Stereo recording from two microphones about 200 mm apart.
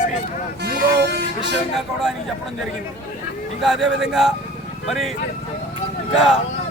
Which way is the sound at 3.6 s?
Centre (ahead or behind).